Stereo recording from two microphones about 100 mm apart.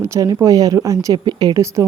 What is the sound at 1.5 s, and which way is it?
Speech, 30° right (ahead or behind).